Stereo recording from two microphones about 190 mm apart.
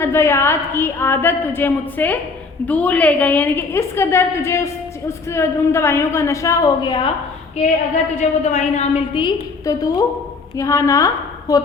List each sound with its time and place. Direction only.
0.0 s a woman's voice: 15° left (ahead or behind)
8.1 s a woman's voice: 40° left (ahead or behind); by 11.6 s 20° left (ahead or behind)